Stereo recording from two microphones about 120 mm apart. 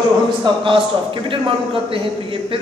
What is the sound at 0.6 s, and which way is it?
A man's voice, 45° right (ahead or behind).